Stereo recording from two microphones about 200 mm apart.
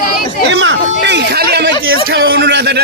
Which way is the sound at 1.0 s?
55° right (ahead or behind).